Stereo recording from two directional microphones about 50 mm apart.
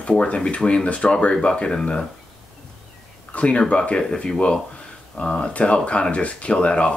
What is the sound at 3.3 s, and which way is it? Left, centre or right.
Speech, left.